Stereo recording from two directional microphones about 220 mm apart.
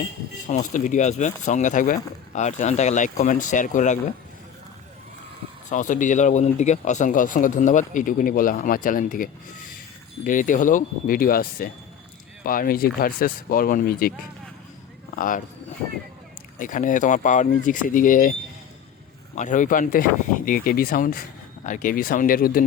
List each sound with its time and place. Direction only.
0.4 s speech: 35° left (ahead or behind)
5.6 s speech: 35° left (ahead or behind)
15.1 s speech: 40° left (ahead or behind)
16.6 s speech: 35° left (ahead or behind)
19.4 s speech: 35° left (ahead or behind)